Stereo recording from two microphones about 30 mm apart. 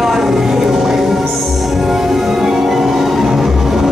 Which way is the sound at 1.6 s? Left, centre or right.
Centre.